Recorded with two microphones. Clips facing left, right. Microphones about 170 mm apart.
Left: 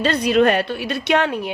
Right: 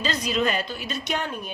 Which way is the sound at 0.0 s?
60° left (ahead or behind).